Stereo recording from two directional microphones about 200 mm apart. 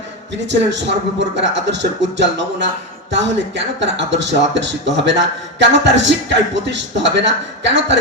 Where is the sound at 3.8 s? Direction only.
65° right (ahead or behind).